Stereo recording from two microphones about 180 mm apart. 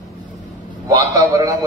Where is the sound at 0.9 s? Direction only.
20° right (ahead or behind).